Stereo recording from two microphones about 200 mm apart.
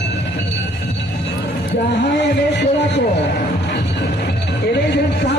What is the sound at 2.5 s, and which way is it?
Music, 60° left (ahead or behind).